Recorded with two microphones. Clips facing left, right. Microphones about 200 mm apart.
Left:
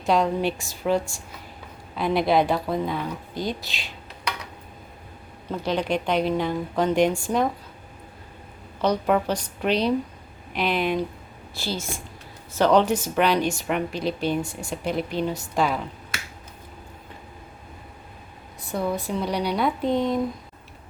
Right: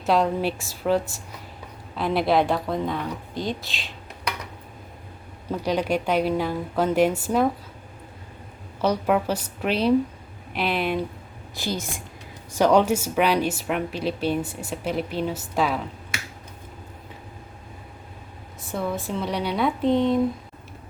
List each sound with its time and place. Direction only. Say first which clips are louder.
0.0 s speech: even; 5° right (ahead or behind)
5.5 s speech: right 1 dB; 10° right (ahead or behind)
8.8 s speech: even; 5° right (ahead or behind)
11.5 s a woman's voice: right 1 dB; 15° right (ahead or behind)
18.7 s speech: left 1 dB; centre (ahead or behind)